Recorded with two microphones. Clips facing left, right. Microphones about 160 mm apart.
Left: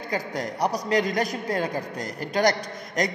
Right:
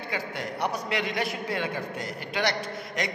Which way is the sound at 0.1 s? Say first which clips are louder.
Left 5 dB; 40° left (ahead or behind).